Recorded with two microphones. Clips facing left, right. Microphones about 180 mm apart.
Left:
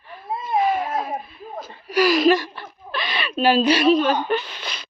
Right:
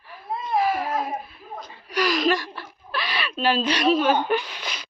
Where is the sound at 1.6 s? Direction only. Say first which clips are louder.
Left 6 dB; 5° left (ahead or behind).